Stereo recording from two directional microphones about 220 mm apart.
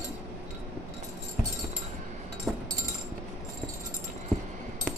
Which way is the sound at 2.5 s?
Centre (ahead or behind).